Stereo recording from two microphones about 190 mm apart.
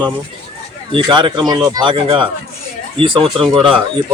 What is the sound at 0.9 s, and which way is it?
Speech, 25° right (ahead or behind).